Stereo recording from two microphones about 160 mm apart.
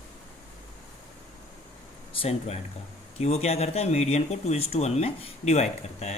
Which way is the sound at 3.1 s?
40° left (ahead or behind).